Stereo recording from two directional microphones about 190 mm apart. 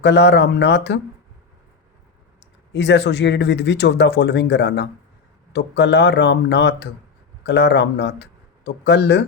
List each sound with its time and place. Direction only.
0.0 s speech: 65° left (ahead or behind)
2.7 s speech: 65° left (ahead or behind)